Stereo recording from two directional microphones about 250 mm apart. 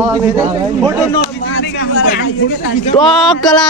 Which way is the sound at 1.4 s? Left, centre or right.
Left.